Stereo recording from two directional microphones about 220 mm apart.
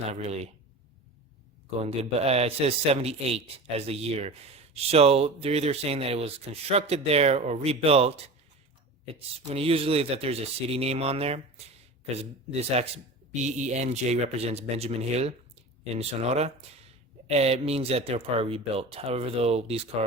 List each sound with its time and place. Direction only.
0.1 s a man's voice: 30° right (ahead or behind)
1.8 s a man's voice: 30° right (ahead or behind)